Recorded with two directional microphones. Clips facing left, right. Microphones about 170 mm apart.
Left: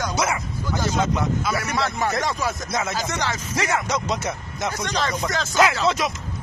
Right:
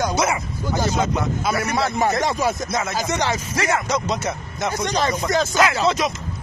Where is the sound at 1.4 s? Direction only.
20° right (ahead or behind).